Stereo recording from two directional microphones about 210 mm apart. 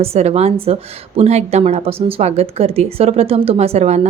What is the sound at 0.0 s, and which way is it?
Speech, 30° right (ahead or behind).